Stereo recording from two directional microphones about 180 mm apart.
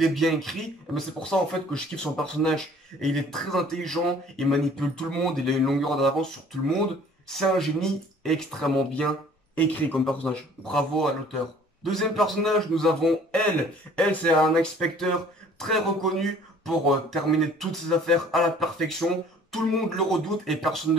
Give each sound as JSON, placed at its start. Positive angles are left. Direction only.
{"t": 0.0, "sound": "speech", "side_deg": 0}
{"t": 7.2, "sound": "speech", "side_deg": 0}